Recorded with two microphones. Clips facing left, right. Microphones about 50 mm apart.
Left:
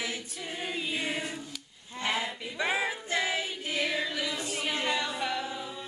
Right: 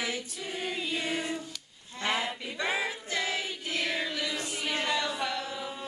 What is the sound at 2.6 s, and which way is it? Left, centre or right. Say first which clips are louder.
Choir: left 2 dB; centre.